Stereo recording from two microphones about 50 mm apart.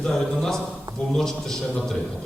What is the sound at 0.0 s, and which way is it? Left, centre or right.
Speech, centre.